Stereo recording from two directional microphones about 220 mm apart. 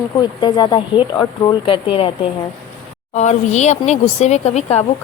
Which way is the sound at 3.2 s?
30° left (ahead or behind).